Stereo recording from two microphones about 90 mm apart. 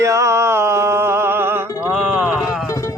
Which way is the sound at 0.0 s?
35° right (ahead or behind).